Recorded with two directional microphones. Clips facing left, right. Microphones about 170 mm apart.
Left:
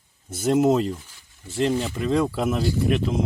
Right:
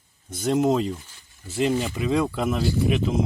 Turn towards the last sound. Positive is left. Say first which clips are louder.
# even
turn(degrees=0)  # may be behind; listen again after turning